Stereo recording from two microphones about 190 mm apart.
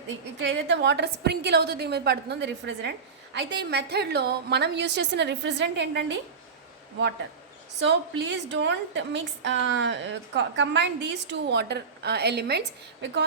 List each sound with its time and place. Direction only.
0.3 s a woman's voice: 65° right (ahead or behind)
7.8 s a woman's voice: 65° right (ahead or behind)